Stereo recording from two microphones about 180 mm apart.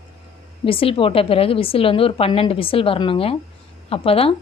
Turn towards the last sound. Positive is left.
turn(degrees=30)  # may be behind; listen again after turning